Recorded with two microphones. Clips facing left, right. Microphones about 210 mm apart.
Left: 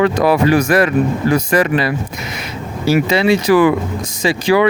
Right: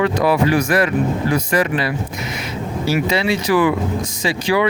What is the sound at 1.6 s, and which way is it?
Speech, 65° left (ahead or behind).